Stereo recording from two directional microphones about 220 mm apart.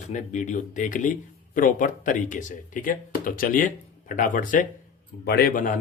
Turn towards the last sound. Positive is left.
turn(degrees=35)  # may be behind; listen again after turning